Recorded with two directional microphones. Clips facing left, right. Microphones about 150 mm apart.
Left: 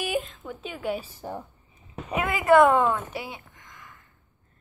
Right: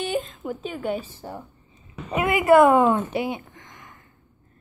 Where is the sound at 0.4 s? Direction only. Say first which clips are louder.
Right 7 dB; 10° right (ahead or behind).